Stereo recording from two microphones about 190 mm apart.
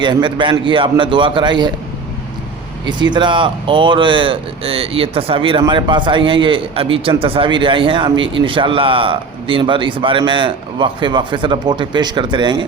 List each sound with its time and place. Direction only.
0.0 s speech: 25° right (ahead or behind)
2.8 s speech: 25° right (ahead or behind)